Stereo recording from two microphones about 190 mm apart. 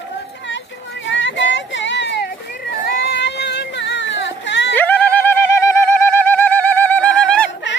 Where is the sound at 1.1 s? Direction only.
75° left (ahead or behind).